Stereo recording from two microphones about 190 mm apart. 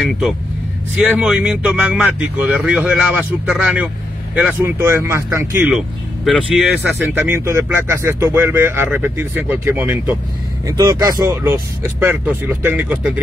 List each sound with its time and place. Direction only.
0.9 s speech: 5° right (ahead or behind)
6.8 s speech: 10° right (ahead or behind)